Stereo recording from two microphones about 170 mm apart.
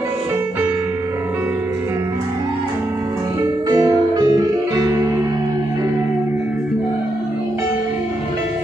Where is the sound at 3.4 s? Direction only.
15° right (ahead or behind).